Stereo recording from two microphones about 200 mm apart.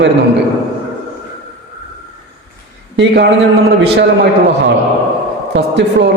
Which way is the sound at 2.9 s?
60° right (ahead or behind).